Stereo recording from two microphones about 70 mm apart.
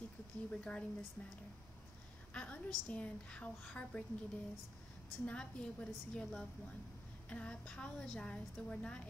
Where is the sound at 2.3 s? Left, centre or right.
Centre.